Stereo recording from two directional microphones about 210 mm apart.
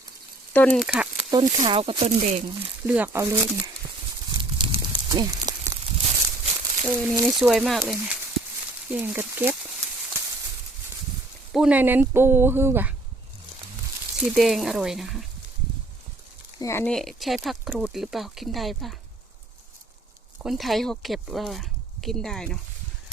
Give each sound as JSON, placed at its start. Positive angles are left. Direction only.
{"t": 0.5, "sound": "speech", "side_deg": 5}
{"t": 1.3, "sound": "speech", "side_deg": -25}
{"t": 2.8, "sound": "speech", "side_deg": -10}
{"t": 4.4, "sound": "a sound", "side_deg": -25}
{"t": 6.8, "sound": "speech", "side_deg": -5}
{"t": 11.5, "sound": "speech", "side_deg": -5}
{"t": 14.3, "sound": "speech", "side_deg": 0}
{"t": 16.6, "sound": "speech", "side_deg": 15}
{"t": 20.4, "sound": "speech", "side_deg": 0}